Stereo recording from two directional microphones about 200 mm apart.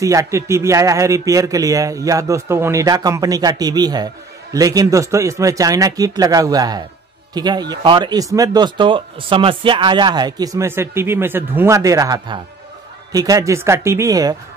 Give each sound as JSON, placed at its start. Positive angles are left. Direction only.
{"t": 0.0, "sound": "a man's voice", "side_deg": -15}